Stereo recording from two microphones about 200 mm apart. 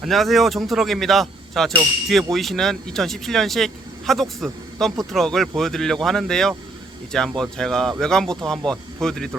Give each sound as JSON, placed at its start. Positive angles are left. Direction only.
{"t": 0.0, "sound": "speech", "side_deg": 0}